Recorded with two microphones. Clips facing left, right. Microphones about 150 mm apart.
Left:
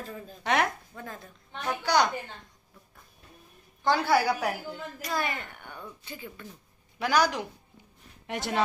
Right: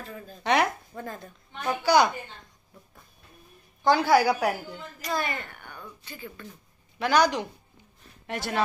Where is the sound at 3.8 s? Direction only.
Centre (ahead or behind).